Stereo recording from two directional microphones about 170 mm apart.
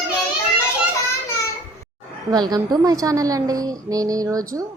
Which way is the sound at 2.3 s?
25° right (ahead or behind).